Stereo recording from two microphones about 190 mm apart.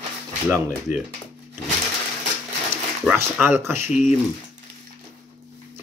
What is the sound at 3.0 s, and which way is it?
Speech, 10° right (ahead or behind).